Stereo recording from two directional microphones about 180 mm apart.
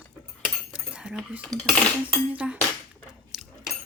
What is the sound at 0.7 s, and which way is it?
Cutlery, 5° right (ahead or behind).